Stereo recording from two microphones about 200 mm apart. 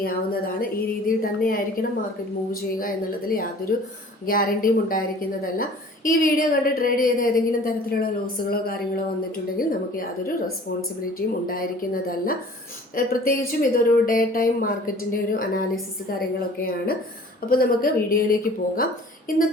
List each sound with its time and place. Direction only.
0.0 s a woman's voice: 45° left (ahead or behind)